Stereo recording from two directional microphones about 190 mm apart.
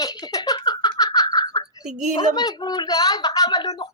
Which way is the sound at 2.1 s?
20° left (ahead or behind).